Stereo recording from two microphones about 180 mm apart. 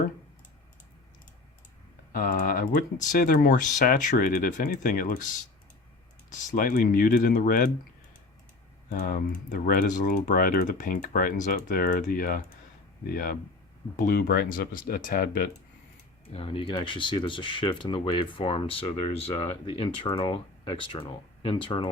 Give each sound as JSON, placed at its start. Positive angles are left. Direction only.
{"t": 2.1, "sound": "speech", "side_deg": 50}
{"t": 6.5, "sound": "speech", "side_deg": 50}
{"t": 8.9, "sound": "speech", "side_deg": 50}
{"t": 16.2, "sound": "speech", "side_deg": 30}